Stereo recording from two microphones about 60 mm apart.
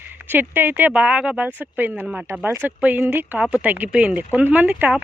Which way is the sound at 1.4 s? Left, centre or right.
Right.